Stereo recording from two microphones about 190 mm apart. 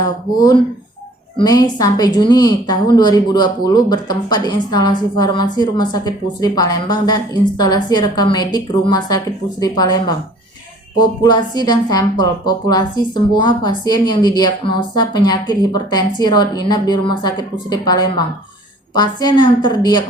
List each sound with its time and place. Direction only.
0.3 s speech: 20° left (ahead or behind)